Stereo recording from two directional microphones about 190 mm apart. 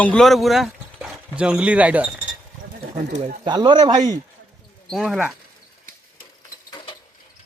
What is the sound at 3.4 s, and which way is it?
Speech, 25° right (ahead or behind).